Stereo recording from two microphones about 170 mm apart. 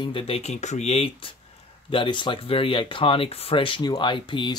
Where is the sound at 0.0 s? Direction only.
30° left (ahead or behind).